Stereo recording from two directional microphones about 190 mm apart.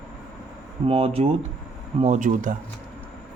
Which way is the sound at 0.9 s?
30° right (ahead or behind).